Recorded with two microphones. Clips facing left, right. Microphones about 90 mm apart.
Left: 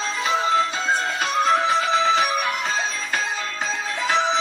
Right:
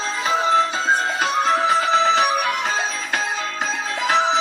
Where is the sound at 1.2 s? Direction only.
35° right (ahead or behind).